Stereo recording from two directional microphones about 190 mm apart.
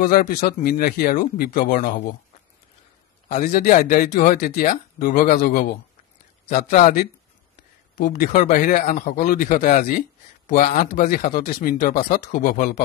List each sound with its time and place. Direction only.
0.0 s speech: 50° left (ahead or behind)
3.3 s a man's voice: 40° left (ahead or behind)
8.0 s speech: 50° left (ahead or behind)